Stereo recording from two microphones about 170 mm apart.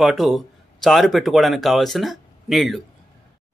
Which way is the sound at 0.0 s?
Centre (ahead or behind).